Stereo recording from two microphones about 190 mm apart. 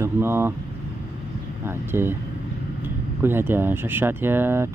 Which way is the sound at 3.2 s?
10° right (ahead or behind).